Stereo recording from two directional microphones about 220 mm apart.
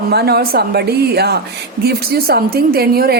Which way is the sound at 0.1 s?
45° right (ahead or behind).